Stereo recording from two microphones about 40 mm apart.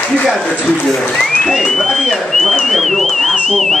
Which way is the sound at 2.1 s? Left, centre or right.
Centre.